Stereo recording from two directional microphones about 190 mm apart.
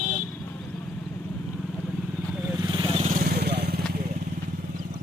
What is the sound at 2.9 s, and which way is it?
Vehicle, 40° right (ahead or behind).